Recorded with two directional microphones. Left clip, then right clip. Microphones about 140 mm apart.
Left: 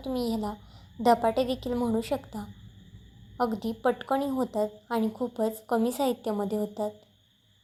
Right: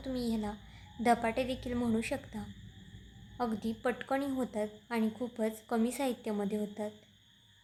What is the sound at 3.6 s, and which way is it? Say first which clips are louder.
A woman's voice: left 7 dB; 20° left (ahead or behind).